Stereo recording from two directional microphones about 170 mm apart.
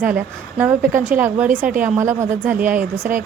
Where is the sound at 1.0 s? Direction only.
10° right (ahead or behind).